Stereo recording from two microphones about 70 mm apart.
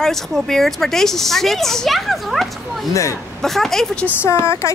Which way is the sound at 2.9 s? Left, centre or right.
Left.